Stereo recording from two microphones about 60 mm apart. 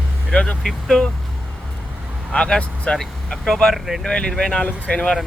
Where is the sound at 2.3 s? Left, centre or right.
Centre.